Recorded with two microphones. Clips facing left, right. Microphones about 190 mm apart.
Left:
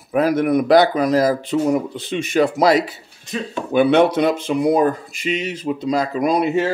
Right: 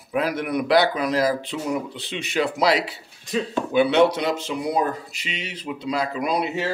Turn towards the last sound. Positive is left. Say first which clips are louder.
# left 7 dB
turn(degrees=50)  # may be behind; listen again after turning